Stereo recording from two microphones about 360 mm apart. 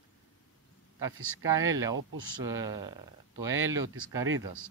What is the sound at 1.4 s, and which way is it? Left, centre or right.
Speech, centre.